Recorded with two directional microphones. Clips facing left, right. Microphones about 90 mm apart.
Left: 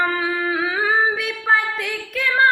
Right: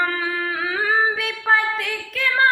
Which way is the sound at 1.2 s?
45° right (ahead or behind).